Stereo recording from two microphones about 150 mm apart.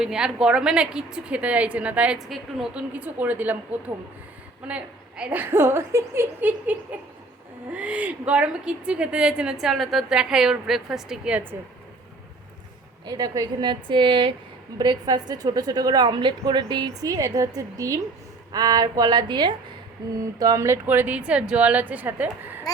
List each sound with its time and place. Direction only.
0.0 s a woman's voice: 5° right (ahead or behind)
13.1 s a woman's voice: 25° right (ahead or behind)